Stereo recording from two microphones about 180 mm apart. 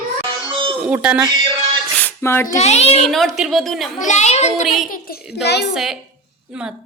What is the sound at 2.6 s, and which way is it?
Speech, 35° left (ahead or behind).